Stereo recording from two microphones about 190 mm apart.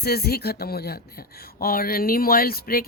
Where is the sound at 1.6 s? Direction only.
50° left (ahead or behind).